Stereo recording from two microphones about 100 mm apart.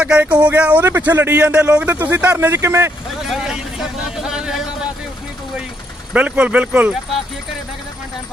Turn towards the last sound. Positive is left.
turn(degrees=-15)  # may be behind; listen again after turning